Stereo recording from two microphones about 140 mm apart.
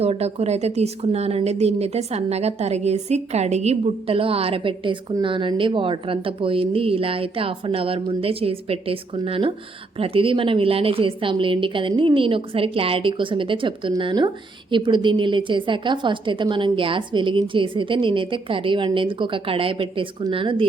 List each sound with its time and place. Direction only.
0.0 s a woman's voice: 50° right (ahead or behind)